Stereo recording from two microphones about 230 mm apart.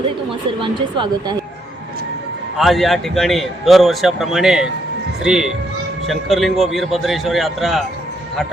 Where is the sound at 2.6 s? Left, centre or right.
Centre.